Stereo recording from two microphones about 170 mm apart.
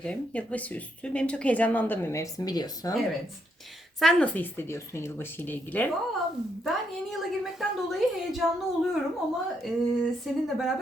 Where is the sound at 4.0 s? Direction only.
Centre (ahead or behind).